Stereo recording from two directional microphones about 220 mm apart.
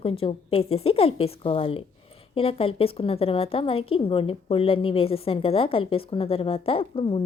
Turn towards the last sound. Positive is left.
turn(degrees=25)  # may be behind; listen again after turning